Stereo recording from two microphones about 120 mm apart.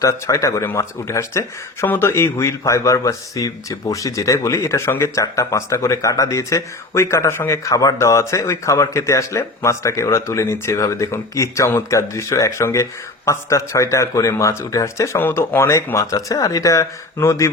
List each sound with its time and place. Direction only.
0.0 s speech: 25° left (ahead or behind)